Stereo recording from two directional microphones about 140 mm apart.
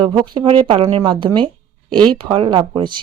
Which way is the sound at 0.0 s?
35° right (ahead or behind).